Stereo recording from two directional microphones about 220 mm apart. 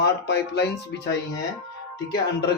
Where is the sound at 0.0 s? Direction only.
50° left (ahead or behind).